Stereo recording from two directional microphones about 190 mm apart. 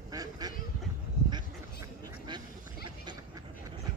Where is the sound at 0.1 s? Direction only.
20° right (ahead or behind).